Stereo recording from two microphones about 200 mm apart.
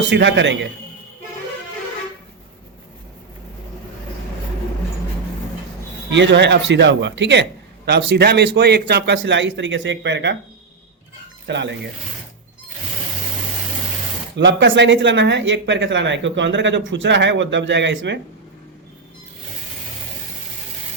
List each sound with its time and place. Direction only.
0.1 s speech: 60° right (ahead or behind)
6.1 s speech: 60° right (ahead or behind)
11.4 s speech: 60° right (ahead or behind)
14.3 s speech: 60° right (ahead or behind)